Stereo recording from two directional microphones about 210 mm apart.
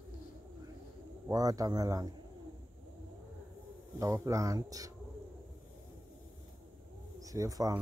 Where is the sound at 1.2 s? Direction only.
15° right (ahead or behind).